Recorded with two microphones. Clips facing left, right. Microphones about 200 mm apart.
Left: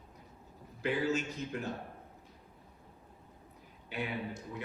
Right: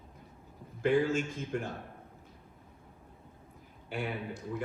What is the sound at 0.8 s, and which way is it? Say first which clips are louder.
Speech: right 5 dB; 50° right (ahead or behind).